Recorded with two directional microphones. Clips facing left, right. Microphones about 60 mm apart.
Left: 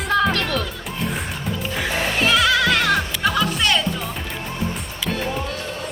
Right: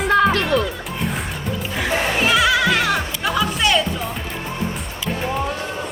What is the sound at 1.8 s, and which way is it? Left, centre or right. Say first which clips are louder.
Music: right 2 dB; centre.